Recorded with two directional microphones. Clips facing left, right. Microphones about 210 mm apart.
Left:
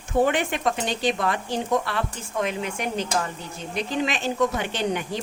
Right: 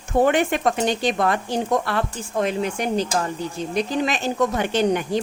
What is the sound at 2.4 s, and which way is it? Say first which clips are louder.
A woman's voice: right 4 dB; 35° right (ahead or behind).